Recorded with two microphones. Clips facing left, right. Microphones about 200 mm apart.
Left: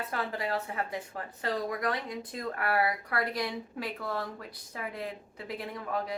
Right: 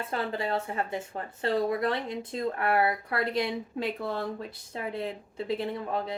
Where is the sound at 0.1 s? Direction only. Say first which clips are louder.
Right 4 dB; 25° right (ahead or behind).